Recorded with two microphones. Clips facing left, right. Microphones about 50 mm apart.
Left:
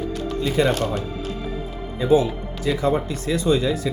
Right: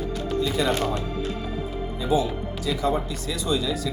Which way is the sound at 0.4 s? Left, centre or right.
Left.